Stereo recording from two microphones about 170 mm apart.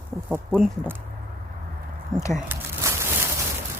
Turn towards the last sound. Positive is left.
turn(degrees=-15)  # may be behind; listen again after turning